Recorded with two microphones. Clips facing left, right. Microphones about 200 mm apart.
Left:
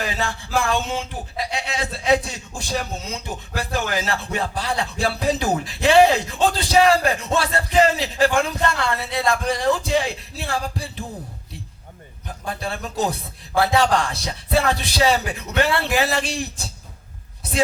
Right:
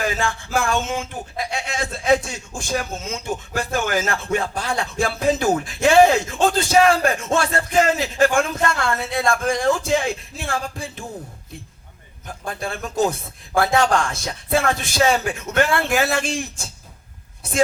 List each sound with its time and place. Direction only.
0.0 s speech: 50° right (ahead or behind)
12.5 s speech: 50° right (ahead or behind)